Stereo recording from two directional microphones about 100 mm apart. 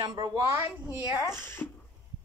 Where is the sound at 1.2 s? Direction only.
25° left (ahead or behind).